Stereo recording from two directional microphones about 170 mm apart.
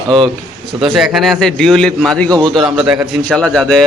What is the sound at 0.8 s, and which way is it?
A man's voice, centre (ahead or behind).